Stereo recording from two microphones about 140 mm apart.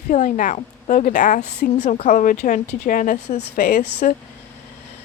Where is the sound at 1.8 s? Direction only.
55° left (ahead or behind); by 4.1 s 85° left.